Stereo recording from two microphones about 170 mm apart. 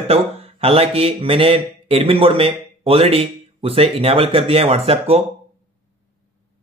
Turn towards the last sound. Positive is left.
turn(degrees=-35)  # may be behind; listen again after turning